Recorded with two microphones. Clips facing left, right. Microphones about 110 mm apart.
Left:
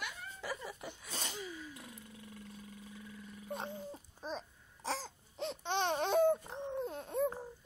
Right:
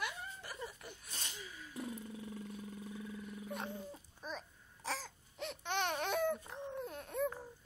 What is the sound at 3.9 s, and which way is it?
Babbling, 30° left (ahead or behind).